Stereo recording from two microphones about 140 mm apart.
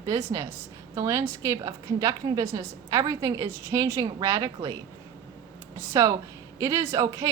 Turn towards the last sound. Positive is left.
turn(degrees=-25)  # may be behind; listen again after turning